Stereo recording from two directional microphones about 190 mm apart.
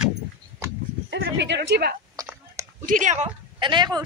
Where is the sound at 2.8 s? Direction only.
40° right (ahead or behind).